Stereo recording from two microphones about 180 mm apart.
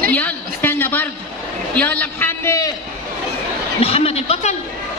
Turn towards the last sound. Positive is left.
turn(degrees=35)  # may be behind; listen again after turning